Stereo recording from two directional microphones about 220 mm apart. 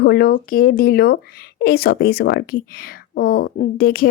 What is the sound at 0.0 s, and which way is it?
Speech, 45° left (ahead or behind).